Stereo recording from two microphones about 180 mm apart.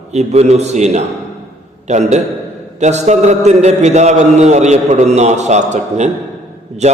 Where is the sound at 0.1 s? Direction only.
40° right (ahead or behind).